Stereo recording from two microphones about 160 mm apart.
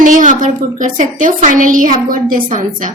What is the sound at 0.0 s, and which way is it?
A woman's voice, 55° right (ahead or behind).